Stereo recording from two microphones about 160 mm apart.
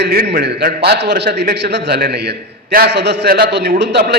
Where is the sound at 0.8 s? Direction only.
90° right.